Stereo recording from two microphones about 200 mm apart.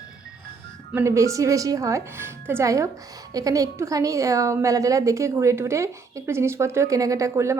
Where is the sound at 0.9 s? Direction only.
15° right (ahead or behind).